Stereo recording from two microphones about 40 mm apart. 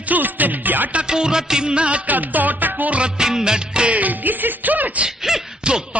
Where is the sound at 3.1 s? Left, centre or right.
Centre.